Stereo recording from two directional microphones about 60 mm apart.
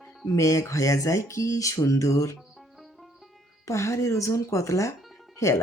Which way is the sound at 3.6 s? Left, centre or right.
Left.